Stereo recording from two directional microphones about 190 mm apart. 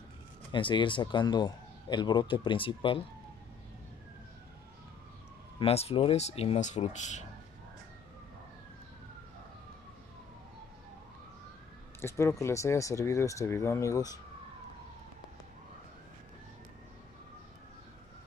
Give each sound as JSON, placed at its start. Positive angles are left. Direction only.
{"t": 0.5, "sound": "a man's voice", "side_deg": 25}
{"t": 5.6, "sound": "speech", "side_deg": 30}
{"t": 12.0, "sound": "speech", "side_deg": 15}